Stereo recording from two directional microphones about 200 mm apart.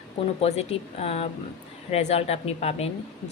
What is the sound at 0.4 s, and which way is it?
Speech, 35° left (ahead or behind).